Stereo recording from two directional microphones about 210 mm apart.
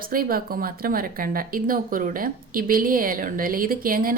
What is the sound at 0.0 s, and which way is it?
Speech, 45° right (ahead or behind).